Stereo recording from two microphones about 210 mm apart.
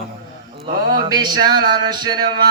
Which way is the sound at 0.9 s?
20° right (ahead or behind).